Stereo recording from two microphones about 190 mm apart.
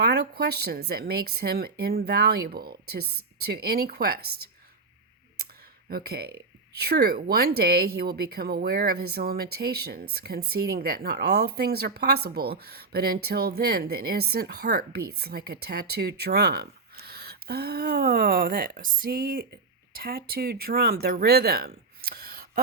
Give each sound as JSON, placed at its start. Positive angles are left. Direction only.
{"t": 0.0, "sound": "speech", "side_deg": -55}
{"t": 5.9, "sound": "speech", "side_deg": -55}
{"t": 22.1, "sound": "a sound", "side_deg": -50}